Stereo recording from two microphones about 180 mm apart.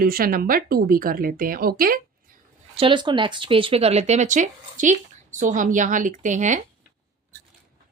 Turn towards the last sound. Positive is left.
turn(degrees=-45)  # may be behind; listen again after turning